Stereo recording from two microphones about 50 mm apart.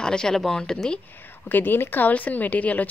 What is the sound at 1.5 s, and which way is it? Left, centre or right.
Speech, left.